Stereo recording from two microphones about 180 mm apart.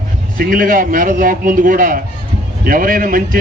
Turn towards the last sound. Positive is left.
turn(degrees=-50)  # may be behind; listen again after turning